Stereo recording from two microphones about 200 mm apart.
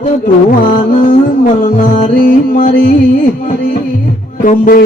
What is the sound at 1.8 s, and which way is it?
Music, 45° left (ahead or behind).